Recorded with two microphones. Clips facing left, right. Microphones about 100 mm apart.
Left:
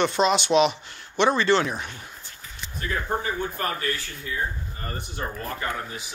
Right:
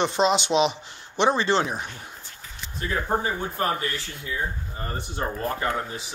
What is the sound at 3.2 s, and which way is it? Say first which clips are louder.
Speech: right 1 dB; 25° right (ahead or behind).